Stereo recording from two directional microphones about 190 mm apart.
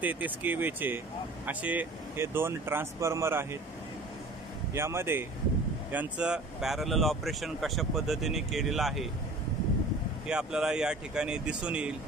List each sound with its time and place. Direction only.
0.0 s speech: 10° right (ahead or behind)
4.7 s speech: 15° right (ahead or behind)
10.2 s speech: 5° right (ahead or behind)